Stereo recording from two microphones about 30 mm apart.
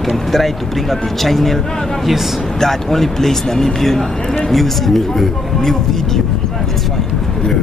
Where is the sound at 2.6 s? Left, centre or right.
Centre.